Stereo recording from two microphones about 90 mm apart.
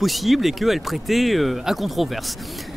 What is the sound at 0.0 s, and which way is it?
Speech, centre (ahead or behind).